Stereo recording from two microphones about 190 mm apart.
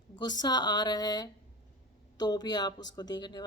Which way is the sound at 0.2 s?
20° left (ahead or behind).